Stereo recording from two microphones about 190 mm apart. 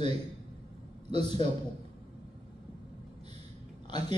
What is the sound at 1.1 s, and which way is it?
Speech, 25° left (ahead or behind).